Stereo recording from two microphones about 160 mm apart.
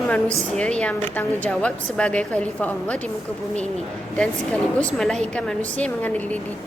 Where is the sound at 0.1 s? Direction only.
5° left (ahead or behind).